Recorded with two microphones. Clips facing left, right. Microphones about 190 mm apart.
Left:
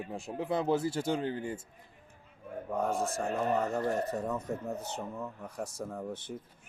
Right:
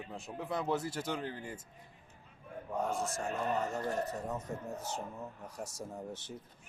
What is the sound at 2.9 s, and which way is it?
Speech, 60° left (ahead or behind).